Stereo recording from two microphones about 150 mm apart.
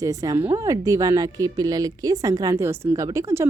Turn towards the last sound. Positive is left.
turn(degrees=-20)  # may be behind; listen again after turning